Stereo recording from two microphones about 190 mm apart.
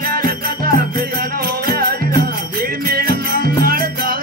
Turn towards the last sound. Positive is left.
turn(degrees=-50)  # may be behind; listen again after turning